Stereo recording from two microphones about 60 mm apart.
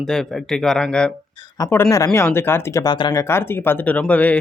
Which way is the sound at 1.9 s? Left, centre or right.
Left.